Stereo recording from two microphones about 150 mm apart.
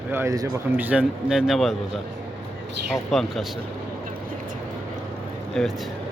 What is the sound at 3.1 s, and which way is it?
Speech, centre (ahead or behind).